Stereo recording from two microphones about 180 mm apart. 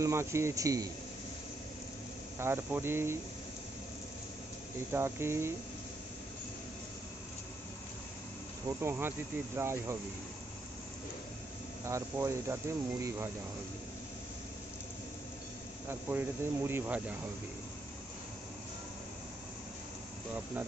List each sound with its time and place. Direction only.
0.0 s speech: 15° right (ahead or behind)
2.3 s speech: 15° right (ahead or behind)
4.9 s speech: 15° right (ahead or behind)
8.6 s speech: 15° right (ahead or behind)
11.8 s speech: 15° right (ahead or behind)
15.9 s speech: 10° right (ahead or behind)